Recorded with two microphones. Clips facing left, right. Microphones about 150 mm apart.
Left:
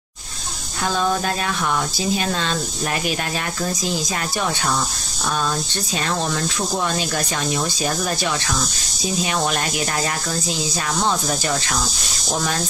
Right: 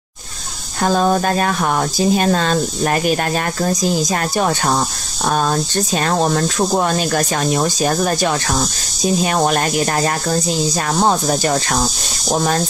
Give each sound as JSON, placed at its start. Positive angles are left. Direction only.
{"t": 0.8, "sound": "speech", "side_deg": -45}